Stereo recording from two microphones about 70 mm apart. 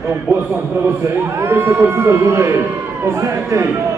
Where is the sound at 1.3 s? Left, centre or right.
Right.